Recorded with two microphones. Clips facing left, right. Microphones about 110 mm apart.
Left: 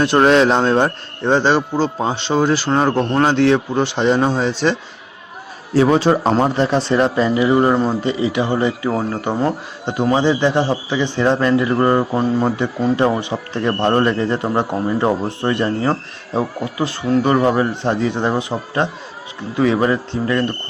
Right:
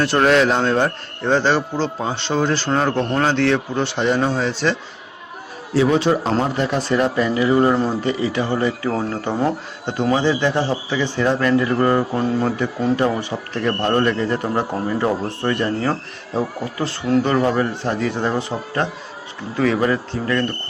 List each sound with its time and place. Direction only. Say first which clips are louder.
0.0 s a man's voice: left 3 dB; 20° left (ahead or behind)
5.7 s a man's voice: left 3 dB; 40° left (ahead or behind); by 20.5 s 20° left (ahead or behind)